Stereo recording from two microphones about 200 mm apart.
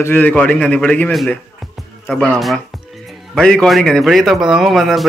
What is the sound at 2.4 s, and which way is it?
Speech, centre (ahead or behind).